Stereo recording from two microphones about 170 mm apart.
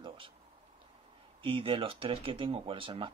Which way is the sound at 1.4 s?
30° right (ahead or behind).